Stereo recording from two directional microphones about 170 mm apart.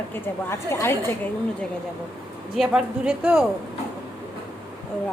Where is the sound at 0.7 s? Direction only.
15° left (ahead or behind).